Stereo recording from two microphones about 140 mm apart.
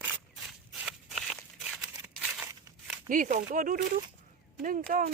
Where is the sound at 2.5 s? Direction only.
20° right (ahead or behind).